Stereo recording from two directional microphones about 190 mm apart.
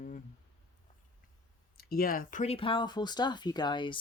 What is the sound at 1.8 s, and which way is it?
Speech, 50° left (ahead or behind).